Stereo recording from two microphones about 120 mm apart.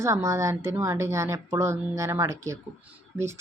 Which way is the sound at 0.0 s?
25° right (ahead or behind).